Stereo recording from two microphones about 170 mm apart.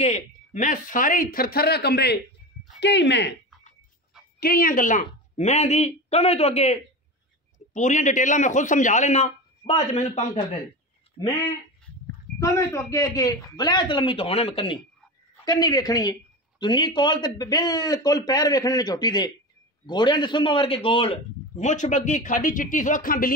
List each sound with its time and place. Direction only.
0.0 s speech: 45° left (ahead or behind); by 2.1 s 75° left (ahead or behind)
2.8 s speech: 90° left
4.4 s a man's voice: 60° left (ahead or behind); by 10.4 s 45° left (ahead or behind)
12.4 s a man's voice: 20° left (ahead or behind); by 23.3 s 55° left (ahead or behind)